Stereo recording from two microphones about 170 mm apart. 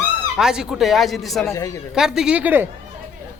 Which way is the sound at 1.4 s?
15° left (ahead or behind).